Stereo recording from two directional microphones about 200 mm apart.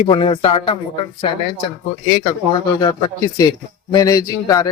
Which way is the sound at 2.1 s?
25° left (ahead or behind).